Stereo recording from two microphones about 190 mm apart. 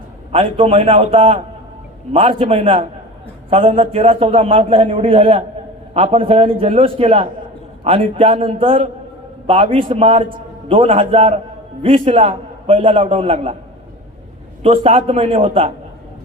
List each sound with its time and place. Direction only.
0.3 s a man's voice: 30° right (ahead or behind)
14.6 s a man's voice: 30° right (ahead or behind)